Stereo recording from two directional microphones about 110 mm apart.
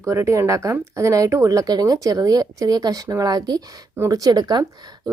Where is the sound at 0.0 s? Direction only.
25° right (ahead or behind).